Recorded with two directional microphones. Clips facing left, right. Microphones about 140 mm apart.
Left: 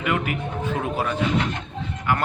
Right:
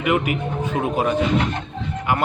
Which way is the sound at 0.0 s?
15° right (ahead or behind).